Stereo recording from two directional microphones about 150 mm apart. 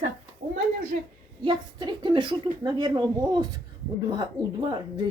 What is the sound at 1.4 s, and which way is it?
A woman's voice, 30° right (ahead or behind).